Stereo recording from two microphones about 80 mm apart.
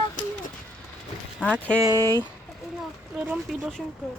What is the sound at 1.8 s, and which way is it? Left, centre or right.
Speech, right.